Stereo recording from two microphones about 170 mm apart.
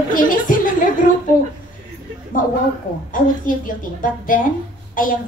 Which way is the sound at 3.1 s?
55° left (ahead or behind).